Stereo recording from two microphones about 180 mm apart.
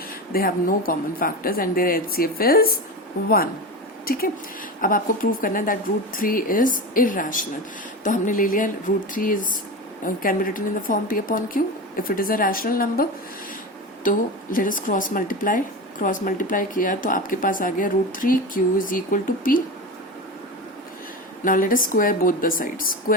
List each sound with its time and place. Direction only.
0.3 s a woman's voice: 55° left (ahead or behind)
21.4 s speech: 50° left (ahead or behind)